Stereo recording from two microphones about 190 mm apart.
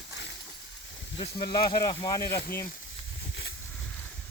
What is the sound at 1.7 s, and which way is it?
Speech, 20° left (ahead or behind).